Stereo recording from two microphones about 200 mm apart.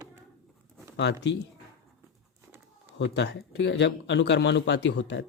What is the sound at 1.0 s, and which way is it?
Speech, 60° left (ahead or behind).